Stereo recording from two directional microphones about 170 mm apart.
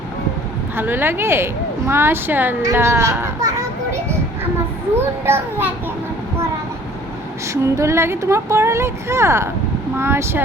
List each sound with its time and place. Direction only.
0.8 s speech: 15° right (ahead or behind)
5.2 s speech: 10° right (ahead or behind)
7.5 s speech: 15° right (ahead or behind)